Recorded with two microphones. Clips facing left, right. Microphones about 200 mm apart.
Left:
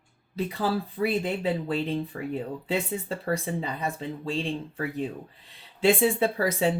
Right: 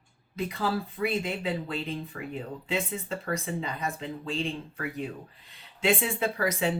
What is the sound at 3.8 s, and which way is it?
Speech, 35° left (ahead or behind).